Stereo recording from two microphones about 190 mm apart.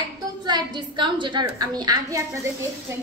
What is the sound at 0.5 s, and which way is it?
A woman's voice, 25° right (ahead or behind).